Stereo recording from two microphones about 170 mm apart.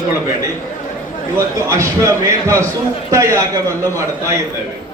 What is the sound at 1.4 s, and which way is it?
A man's voice, 15° right (ahead or behind).